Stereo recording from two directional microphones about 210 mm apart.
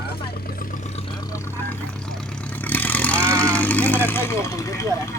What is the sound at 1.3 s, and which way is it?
Vehicle, 10° left (ahead or behind).